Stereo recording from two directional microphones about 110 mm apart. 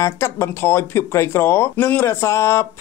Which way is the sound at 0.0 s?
25° left (ahead or behind).